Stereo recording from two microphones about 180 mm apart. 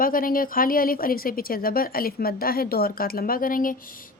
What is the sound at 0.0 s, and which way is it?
A woman's voice, 50° left (ahead or behind).